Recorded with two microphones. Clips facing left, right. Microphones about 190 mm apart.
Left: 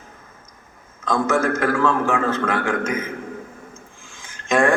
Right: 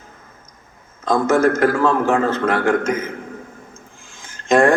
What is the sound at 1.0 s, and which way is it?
Mantra, 40° right (ahead or behind).